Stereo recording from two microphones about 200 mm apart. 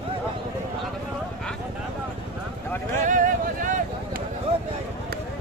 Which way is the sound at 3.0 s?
40° right (ahead or behind).